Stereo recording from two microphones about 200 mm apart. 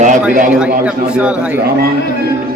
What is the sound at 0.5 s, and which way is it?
A man's voice, 5° right (ahead or behind).